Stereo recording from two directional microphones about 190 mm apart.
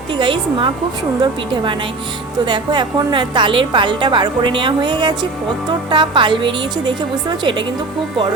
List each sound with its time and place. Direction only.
0.1 s a woman's voice: 25° right (ahead or behind)
2.4 s a woman's voice: 25° right (ahead or behind)